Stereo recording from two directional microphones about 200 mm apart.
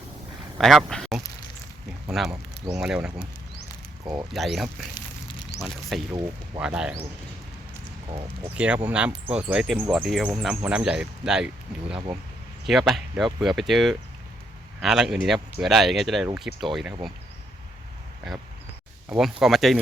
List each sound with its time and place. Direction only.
0.6 s speech: centre (ahead or behind)
4.0 s speech: 15° right (ahead or behind)
4.3 s speech: centre (ahead or behind)
8.5 s speech: 5° right (ahead or behind)
19.0 s speech: 5° right (ahead or behind)